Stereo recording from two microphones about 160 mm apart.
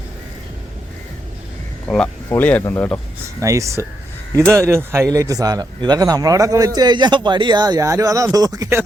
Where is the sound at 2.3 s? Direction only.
10° left (ahead or behind).